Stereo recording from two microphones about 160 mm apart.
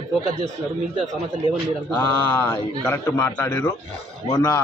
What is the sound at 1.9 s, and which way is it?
A man's voice, 15° left (ahead or behind).